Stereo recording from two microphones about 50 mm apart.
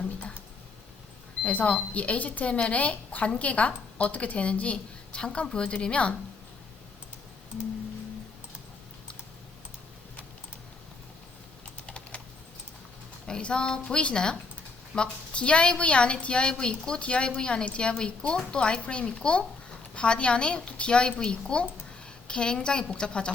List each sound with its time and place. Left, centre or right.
1.5 s speech: left
11.9 s typing: left
13.2 s a woman's voice: centre